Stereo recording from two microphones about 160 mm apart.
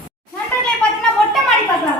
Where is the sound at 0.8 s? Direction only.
5° left (ahead or behind).